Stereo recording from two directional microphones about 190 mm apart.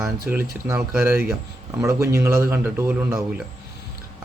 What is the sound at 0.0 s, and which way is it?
Speech, 15° right (ahead or behind).